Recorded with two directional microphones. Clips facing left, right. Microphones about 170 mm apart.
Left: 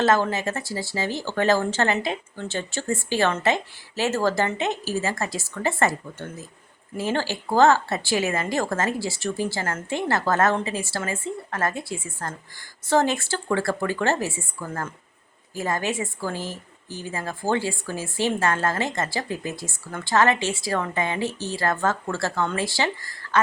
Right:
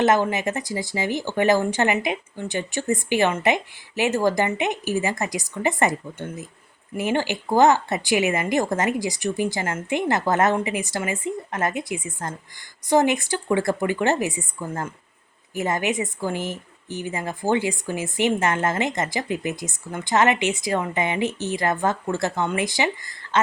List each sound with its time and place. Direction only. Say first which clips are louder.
0.0 s a woman's voice: right 2 dB; 20° right (ahead or behind)